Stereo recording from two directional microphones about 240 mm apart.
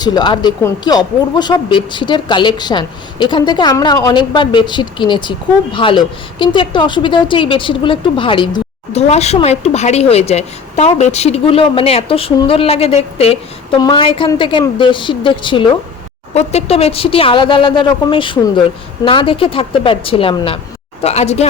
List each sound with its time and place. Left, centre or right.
0.0 s speech: centre